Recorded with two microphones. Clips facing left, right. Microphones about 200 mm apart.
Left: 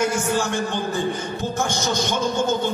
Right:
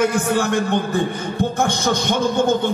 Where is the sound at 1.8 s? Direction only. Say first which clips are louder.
Right 3 dB; 60° right (ahead or behind).